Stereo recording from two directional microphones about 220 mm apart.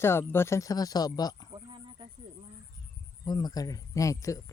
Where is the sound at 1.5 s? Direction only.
20° right (ahead or behind).